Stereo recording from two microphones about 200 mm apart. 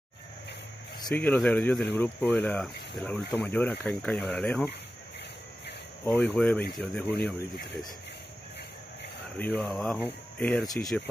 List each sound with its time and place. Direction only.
1.1 s speech: 10° left (ahead or behind)
6.0 s speech: 5° left (ahead or behind)
9.4 s speech: 5° left (ahead or behind)